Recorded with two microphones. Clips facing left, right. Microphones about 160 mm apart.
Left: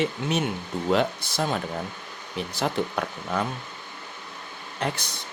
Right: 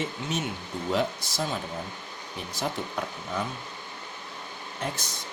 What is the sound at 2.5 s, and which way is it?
Speech, 70° left (ahead or behind).